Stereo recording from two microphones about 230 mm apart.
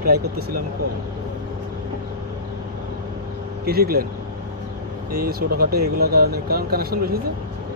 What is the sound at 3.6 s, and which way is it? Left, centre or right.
Speech, right.